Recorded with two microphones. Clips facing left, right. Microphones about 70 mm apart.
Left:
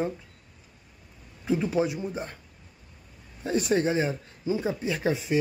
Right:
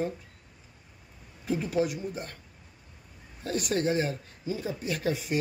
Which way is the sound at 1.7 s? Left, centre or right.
Left.